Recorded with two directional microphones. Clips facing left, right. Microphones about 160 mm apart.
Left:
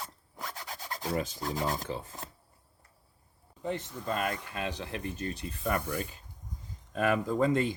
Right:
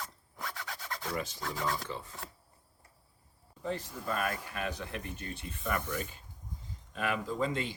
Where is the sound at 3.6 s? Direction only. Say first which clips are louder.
Left 2 dB; 20° left (ahead or behind).